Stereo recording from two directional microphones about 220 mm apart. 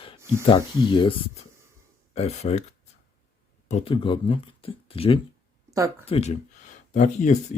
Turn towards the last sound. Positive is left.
turn(degrees=35)  # may be behind; listen again after turning